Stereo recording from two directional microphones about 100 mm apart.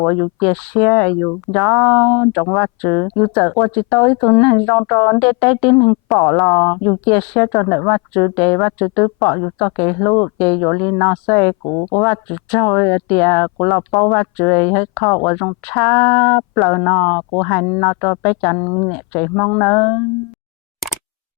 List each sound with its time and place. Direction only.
0.0 s speech: 25° left (ahead or behind)
11.7 s speech: 30° left (ahead or behind)
12.0 s speech: 20° left (ahead or behind)
18.9 s speech: 15° left (ahead or behind)